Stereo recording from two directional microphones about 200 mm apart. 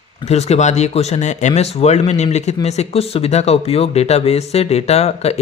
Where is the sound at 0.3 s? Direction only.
35° left (ahead or behind).